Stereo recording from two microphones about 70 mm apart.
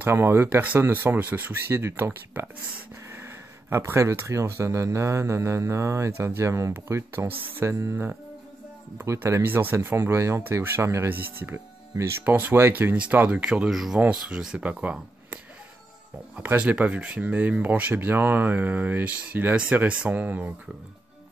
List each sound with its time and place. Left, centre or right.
0.1 s speech: right
9.4 s speech: right
11.1 s speech: right
12.9 s speech: centre
13.7 s speech: centre
16.4 s speech: right